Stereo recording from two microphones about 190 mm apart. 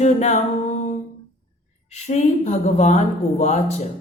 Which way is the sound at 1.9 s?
35° left (ahead or behind).